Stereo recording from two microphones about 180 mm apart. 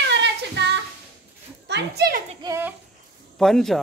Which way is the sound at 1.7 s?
65° right (ahead or behind).